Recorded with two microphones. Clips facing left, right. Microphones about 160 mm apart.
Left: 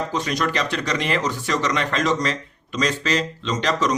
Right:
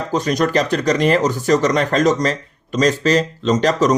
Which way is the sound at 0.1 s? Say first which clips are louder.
Right 6 dB; 40° right (ahead or behind).